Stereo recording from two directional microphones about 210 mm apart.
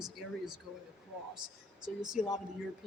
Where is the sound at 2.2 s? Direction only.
5° right (ahead or behind).